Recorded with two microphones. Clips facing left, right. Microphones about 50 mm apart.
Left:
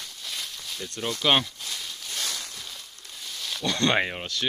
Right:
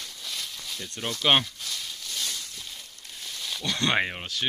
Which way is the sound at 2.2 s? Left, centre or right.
Left.